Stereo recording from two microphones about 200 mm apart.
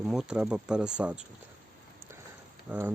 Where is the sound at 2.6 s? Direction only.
10° right (ahead or behind).